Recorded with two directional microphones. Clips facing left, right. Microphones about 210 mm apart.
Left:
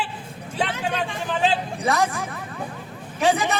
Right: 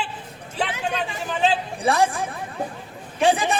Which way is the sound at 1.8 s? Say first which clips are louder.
Right 4 dB; 30° right (ahead or behind).